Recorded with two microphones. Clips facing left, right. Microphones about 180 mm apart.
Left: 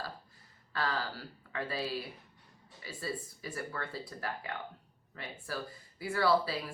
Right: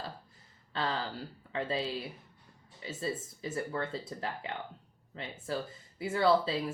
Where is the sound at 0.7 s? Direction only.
20° right (ahead or behind).